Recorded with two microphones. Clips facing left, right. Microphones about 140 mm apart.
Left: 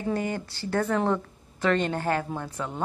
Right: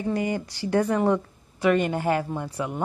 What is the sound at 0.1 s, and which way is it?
Speech, 15° right (ahead or behind).